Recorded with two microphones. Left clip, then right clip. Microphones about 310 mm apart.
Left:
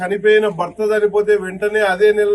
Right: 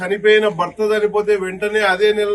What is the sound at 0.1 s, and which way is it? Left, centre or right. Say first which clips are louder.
A man's voice: right 1 dB; centre.